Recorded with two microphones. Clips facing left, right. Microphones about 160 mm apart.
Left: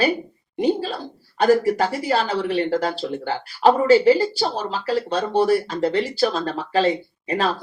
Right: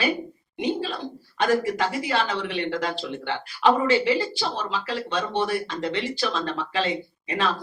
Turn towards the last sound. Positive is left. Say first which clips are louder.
# left 4 dB
turn(degrees=40)  # may be behind; listen again after turning